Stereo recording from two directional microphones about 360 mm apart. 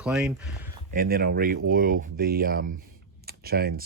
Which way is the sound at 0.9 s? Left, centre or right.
Right.